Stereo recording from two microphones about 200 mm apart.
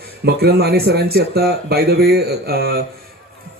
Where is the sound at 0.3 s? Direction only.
55° right (ahead or behind).